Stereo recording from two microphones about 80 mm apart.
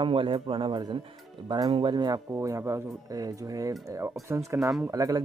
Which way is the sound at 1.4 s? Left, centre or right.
Right.